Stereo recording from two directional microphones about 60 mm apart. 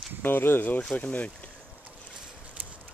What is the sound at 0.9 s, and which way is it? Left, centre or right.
Speech, left.